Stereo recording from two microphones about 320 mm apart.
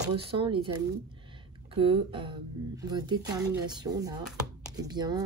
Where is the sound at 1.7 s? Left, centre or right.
Centre.